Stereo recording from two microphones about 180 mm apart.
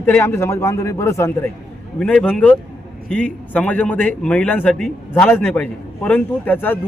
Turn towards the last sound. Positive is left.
turn(degrees=10)  # may be behind; listen again after turning